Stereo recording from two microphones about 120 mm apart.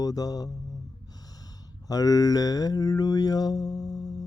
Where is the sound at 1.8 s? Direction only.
30° left (ahead or behind).